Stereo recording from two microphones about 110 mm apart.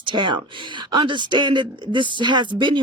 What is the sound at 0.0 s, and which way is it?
Speech, 45° right (ahead or behind).